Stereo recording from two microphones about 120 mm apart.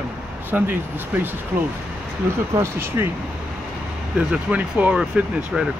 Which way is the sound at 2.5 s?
20° right (ahead or behind).